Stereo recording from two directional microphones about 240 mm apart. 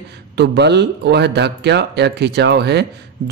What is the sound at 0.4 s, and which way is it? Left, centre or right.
Speech, right.